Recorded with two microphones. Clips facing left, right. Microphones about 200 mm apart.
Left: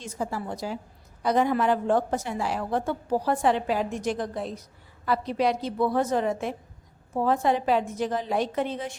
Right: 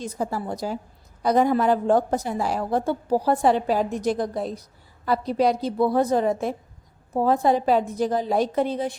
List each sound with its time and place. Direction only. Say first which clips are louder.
0.0 s a woman's voice: right 4 dB; 40° right (ahead or behind)